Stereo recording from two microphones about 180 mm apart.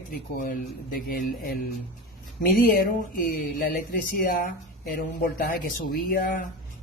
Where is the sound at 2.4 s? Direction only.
55° left (ahead or behind).